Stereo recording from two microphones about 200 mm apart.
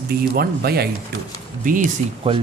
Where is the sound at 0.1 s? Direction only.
50° right (ahead or behind).